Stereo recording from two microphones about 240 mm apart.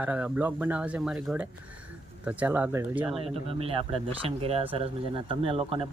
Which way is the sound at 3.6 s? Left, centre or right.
Right.